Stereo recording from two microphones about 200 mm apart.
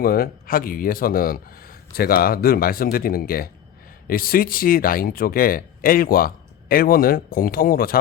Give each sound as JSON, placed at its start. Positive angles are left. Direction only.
{"t": 0.0, "sound": "speech", "side_deg": 50}